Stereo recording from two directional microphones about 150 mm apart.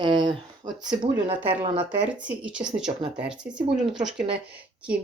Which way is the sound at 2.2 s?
10° right (ahead or behind).